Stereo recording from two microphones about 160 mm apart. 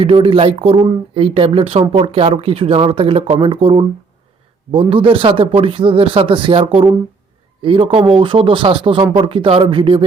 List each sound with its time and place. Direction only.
0.0 s speech: 35° right (ahead or behind)